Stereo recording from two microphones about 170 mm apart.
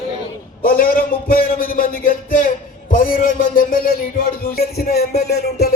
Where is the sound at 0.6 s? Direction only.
55° left (ahead or behind).